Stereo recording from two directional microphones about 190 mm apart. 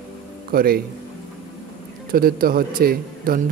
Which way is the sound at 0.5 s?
50° right (ahead or behind).